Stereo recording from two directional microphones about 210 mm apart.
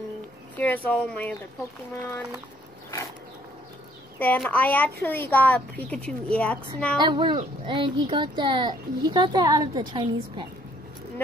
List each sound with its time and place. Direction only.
0.6 s speech: 10° left (ahead or behind)
4.2 s a woman's voice: 5° left (ahead or behind)
7.0 s speech: 20° right (ahead or behind)